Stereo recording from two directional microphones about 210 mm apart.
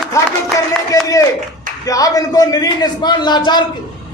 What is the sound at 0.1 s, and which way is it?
Music, 15° left (ahead or behind).